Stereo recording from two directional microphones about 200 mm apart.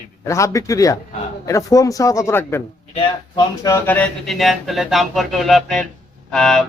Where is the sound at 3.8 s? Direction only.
5° left (ahead or behind).